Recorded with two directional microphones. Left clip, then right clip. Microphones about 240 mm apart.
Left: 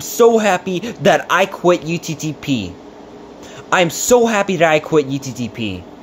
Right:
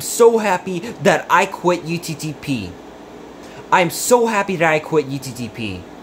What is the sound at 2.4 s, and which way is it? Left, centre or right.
Speech, centre.